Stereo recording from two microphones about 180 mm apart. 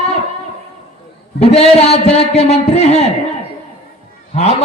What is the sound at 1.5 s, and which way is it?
A man's voice, 35° left (ahead or behind).